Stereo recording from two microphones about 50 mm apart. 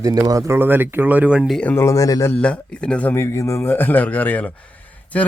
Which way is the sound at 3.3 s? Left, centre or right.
Left.